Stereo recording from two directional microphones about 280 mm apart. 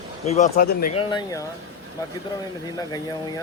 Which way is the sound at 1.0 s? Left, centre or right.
Centre.